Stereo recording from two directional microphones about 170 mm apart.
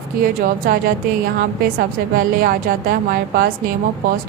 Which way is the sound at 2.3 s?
60° right (ahead or behind).